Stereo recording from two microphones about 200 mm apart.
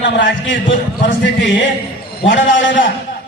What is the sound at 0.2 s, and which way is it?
A man's voice, 65° left (ahead or behind).